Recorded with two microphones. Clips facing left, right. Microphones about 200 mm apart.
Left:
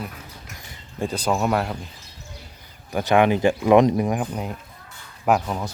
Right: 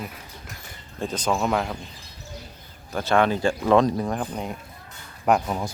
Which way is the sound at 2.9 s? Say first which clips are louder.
Left 3 dB; 15° left (ahead or behind).